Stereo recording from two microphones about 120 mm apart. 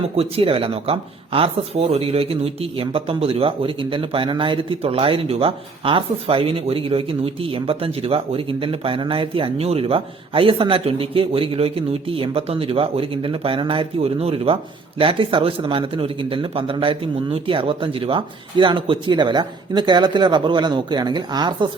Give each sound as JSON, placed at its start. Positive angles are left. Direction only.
{"t": 0.2, "sound": "speech", "side_deg": -50}